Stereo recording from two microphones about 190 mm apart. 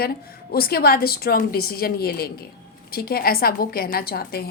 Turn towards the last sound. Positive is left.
turn(degrees=55)  # may be behind; listen again after turning